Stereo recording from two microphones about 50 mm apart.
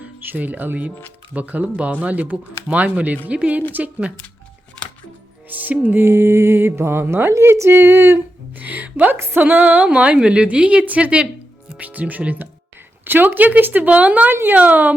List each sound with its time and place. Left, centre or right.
0.0 s speech: right
5.5 s music: right
5.8 s speech: right
6.1 s speech: right
7.7 s speech: right
8.5 s speech: right
9.1 s speech: right
9.4 s speech: right